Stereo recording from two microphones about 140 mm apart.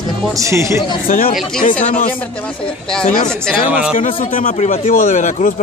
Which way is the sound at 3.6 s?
10° right (ahead or behind).